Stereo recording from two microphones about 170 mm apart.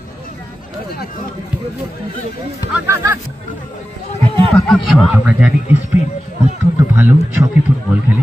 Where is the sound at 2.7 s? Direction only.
15° right (ahead or behind).